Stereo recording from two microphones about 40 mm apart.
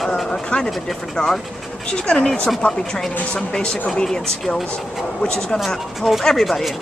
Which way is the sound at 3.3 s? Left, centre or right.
Left.